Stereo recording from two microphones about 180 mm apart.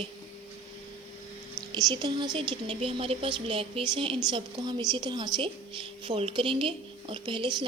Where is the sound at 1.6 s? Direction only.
20° right (ahead or behind).